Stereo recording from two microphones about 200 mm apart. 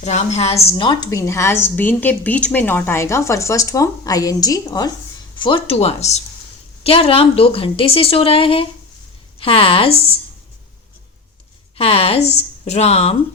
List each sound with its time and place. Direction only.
0.0 s a woman's voice: 35° left (ahead or behind)
11.8 s speech: 30° left (ahead or behind)